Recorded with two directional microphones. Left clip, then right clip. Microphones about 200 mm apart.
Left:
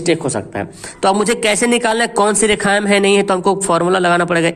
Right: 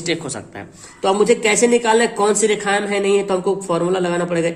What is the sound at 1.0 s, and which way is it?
A man's voice, 45° left (ahead or behind).